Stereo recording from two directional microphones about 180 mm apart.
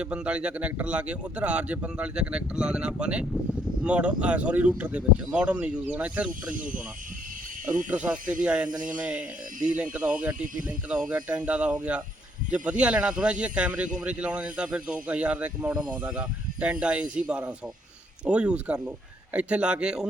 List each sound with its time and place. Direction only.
0.0 s a man's voice: 5° right (ahead or behind)
7.6 s speech: 45° right (ahead or behind)
7.9 s a man's voice: 5° right (ahead or behind)